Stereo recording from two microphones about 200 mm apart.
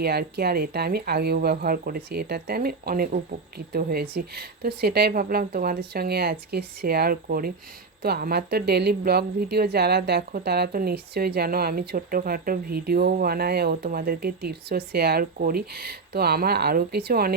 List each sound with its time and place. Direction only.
0.0 s a woman's voice: 55° right (ahead or behind)